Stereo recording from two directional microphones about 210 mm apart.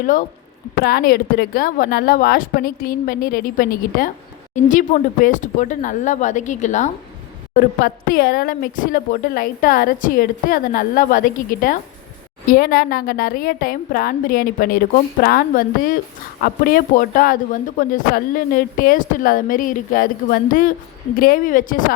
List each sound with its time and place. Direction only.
0.0 s a woman's voice: 40° left (ahead or behind)